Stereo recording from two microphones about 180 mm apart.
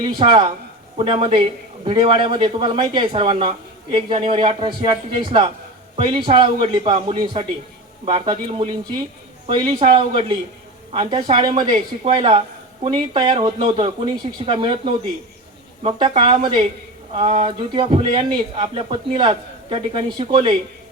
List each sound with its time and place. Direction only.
0.2 s a man's voice: 30° right (ahead or behind)